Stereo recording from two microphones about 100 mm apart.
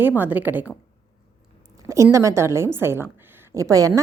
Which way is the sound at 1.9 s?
30° right (ahead or behind).